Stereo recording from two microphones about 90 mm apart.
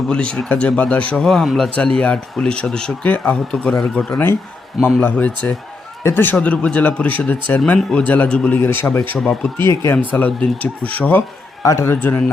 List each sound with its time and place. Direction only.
0.1 s a man's voice: 10° left (ahead or behind)
6.0 s a man's voice: 25° left (ahead or behind)
6.4 s a man's voice: 15° left (ahead or behind)
7.6 s a man's voice: 5° left (ahead or behind)
11.6 s a man's voice: 40° left (ahead or behind)
11.9 s speech: 20° left (ahead or behind)